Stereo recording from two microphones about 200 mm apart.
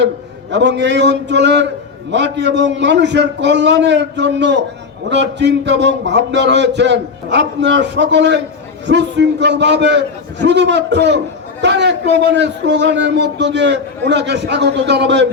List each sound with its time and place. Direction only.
0.5 s a man's voice: 60° right (ahead or behind)